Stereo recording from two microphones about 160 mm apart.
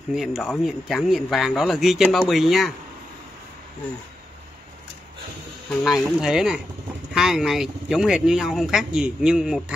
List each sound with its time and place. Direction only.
0.1 s speech: 5° right (ahead or behind)
5.9 s speech: 5° right (ahead or behind)